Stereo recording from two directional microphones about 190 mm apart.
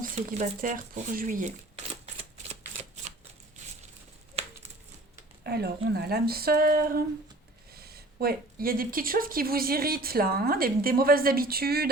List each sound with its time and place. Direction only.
0.0 s a woman's voice: 40° right (ahead or behind)
5.4 s a woman's voice: 55° right (ahead or behind)